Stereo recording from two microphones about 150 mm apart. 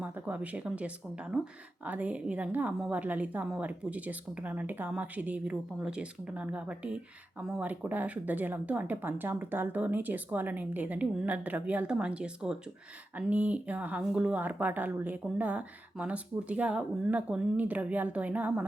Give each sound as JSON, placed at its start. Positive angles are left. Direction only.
{"t": 0.0, "sound": "a woman's voice", "side_deg": -10}